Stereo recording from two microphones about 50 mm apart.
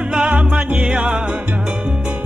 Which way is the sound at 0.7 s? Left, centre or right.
Right.